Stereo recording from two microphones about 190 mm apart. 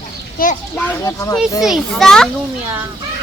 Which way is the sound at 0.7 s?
15° left (ahead or behind).